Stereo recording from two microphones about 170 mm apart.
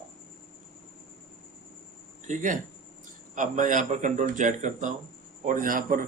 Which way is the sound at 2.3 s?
50° right (ahead or behind).